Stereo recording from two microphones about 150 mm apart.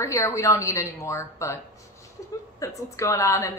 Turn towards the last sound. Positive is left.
turn(degrees=20)  # may be behind; listen again after turning